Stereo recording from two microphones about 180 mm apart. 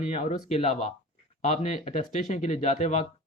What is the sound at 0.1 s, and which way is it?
Speech, 35° left (ahead or behind).